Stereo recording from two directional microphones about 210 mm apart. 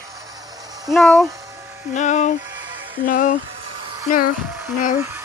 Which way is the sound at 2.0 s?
35° left (ahead or behind).